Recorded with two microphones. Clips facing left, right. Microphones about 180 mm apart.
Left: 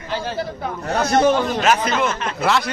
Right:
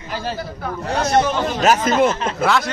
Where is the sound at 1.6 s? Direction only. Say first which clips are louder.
Right 3 dB; 40° right (ahead or behind).